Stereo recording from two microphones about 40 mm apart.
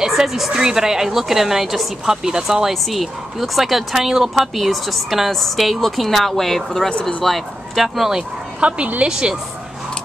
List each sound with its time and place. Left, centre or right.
0.0 s a sound: centre
0.5 s a woman's voice: centre
6.9 s speech: left
7.2 s a woman's voice: centre
8.5 s a woman's voice: right
9.1 s speech: centre